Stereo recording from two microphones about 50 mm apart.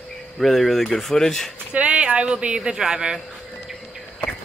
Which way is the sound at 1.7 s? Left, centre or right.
Right.